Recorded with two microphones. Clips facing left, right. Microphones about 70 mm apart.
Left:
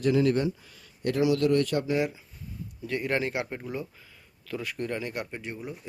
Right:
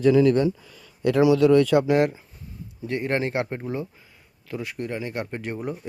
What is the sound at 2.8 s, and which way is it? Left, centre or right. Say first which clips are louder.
Speech: right 3 dB; right.